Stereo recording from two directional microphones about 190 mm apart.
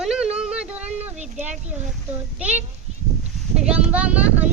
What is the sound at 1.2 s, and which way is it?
Speech, 40° right (ahead or behind).